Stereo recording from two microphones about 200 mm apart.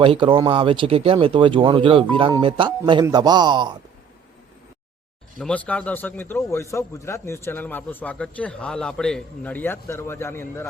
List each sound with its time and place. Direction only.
0.0 s speech: 25° right (ahead or behind)
5.4 s a man's voice: 5° left (ahead or behind)